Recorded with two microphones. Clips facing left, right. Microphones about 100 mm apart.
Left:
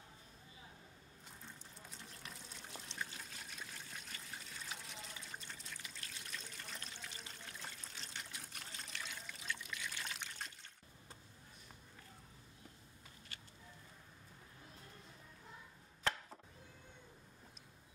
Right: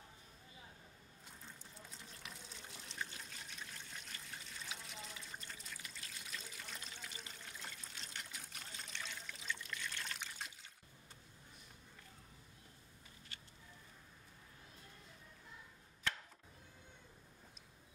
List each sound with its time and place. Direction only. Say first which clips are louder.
1.4 s water: even; centre (ahead or behind)